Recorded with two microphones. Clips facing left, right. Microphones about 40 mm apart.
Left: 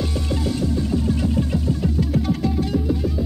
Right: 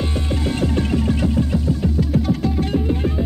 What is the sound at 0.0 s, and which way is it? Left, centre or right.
Music, right.